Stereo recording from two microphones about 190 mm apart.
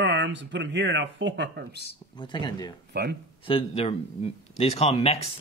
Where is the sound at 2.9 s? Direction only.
60° right (ahead or behind).